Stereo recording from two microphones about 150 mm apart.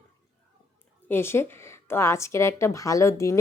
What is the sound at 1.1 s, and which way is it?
A woman's voice, 15° left (ahead or behind).